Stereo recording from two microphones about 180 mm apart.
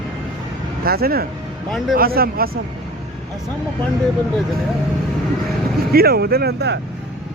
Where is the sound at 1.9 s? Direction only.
55° right (ahead or behind).